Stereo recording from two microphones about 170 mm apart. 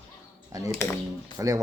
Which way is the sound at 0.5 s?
20° right (ahead or behind).